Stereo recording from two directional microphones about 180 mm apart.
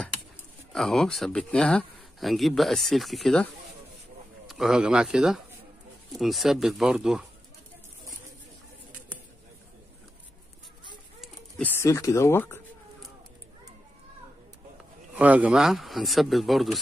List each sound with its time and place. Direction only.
0.7 s speech: centre (ahead or behind)
4.5 s speech: centre (ahead or behind)
11.1 s a sound: 5° left (ahead or behind)
11.8 s speech: 15° left (ahead or behind)
15.1 s speech: 10° right (ahead or behind)